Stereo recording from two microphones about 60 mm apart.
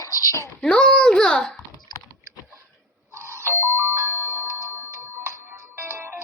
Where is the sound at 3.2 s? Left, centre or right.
Right.